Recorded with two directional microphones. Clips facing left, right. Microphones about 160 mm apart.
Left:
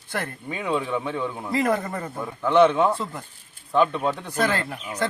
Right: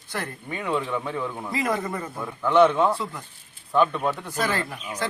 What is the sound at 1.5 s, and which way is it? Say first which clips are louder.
Speech: left 3 dB; 50° left (ahead or behind).